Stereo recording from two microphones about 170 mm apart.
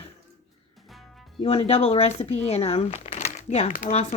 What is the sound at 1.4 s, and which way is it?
Speech, 35° left (ahead or behind).